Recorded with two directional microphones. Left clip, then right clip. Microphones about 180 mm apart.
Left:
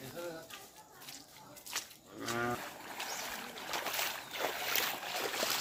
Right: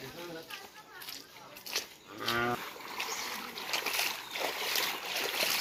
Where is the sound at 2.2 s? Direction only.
50° right (ahead or behind).